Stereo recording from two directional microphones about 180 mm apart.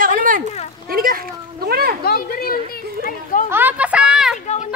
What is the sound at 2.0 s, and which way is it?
Speech, 55° left (ahead or behind).